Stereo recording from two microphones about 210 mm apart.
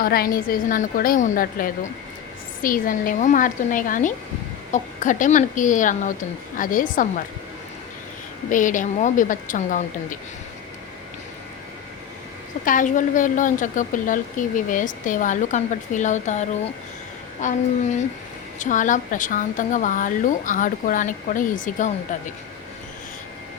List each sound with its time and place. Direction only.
0.0 s a woman's voice: 45° left (ahead or behind)
8.4 s a woman's voice: 40° left (ahead or behind)
12.6 s a woman's voice: 40° left (ahead or behind)
18.6 s a woman's voice: 35° left (ahead or behind)